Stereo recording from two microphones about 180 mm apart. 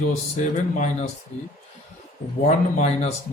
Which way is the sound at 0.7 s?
40° left (ahead or behind).